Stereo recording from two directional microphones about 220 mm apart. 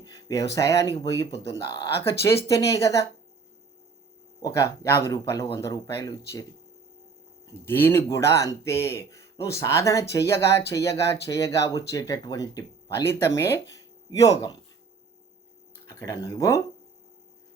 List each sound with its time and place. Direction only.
0.0 s speech: 15° left (ahead or behind)
4.4 s speech: 15° left (ahead or behind)
7.5 s speech: 10° left (ahead or behind)
15.9 s speech: 15° left (ahead or behind)